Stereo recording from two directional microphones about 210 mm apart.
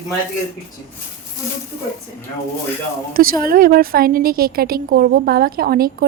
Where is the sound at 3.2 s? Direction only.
45° right (ahead or behind).